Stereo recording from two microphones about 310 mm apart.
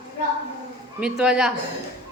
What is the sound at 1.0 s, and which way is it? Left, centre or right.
Speech, centre.